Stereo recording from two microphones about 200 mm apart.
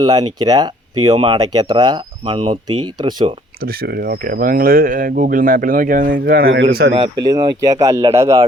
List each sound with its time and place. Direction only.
0.0 s speech: 20° right (ahead or behind)
3.6 s speech: 50° right (ahead or behind)
6.9 s speech: 20° right (ahead or behind)